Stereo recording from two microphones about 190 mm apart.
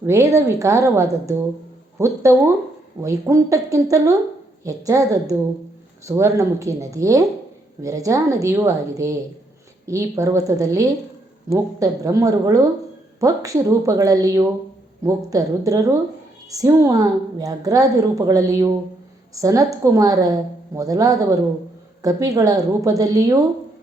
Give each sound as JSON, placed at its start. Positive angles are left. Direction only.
{"t": 0.0, "sound": "a woman's voice", "side_deg": -15}